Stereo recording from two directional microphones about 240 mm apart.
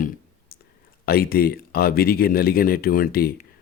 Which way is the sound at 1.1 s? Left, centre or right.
Left.